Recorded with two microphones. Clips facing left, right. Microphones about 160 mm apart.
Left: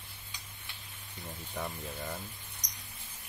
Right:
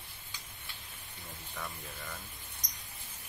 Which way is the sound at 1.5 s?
30° left (ahead or behind).